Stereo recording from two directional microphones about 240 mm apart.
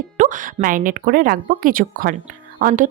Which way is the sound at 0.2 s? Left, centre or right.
Right.